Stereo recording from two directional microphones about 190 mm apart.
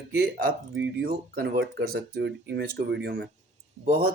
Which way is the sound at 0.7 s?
65° right (ahead or behind).